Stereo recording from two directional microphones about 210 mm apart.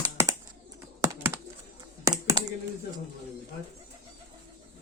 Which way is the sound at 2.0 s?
15° right (ahead or behind).